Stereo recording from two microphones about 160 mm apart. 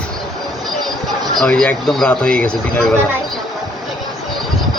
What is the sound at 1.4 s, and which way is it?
Speech, 5° left (ahead or behind).